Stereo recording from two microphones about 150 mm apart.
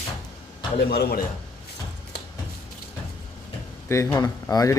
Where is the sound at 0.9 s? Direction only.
90° left.